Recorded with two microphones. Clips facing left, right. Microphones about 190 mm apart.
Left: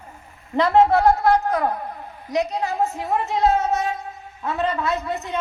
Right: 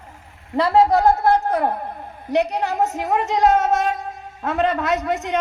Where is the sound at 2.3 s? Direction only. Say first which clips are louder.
Right 3 dB; 70° right (ahead or behind).